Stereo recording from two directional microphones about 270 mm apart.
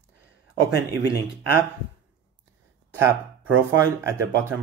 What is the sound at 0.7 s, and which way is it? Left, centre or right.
Speech, left.